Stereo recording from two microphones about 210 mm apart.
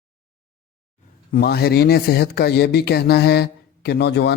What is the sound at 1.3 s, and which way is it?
Speech, 50° left (ahead or behind).